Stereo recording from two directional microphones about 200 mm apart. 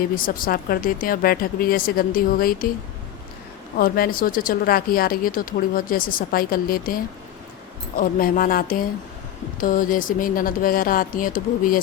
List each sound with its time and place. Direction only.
0.2 s speech: 45° left (ahead or behind)
3.8 s speech: 45° left (ahead or behind)